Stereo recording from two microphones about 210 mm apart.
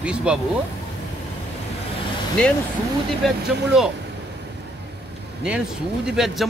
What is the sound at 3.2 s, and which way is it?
Speech, centre (ahead or behind).